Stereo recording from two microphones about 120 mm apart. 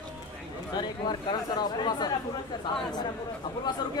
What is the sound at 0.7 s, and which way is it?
Speech, 40° left (ahead or behind).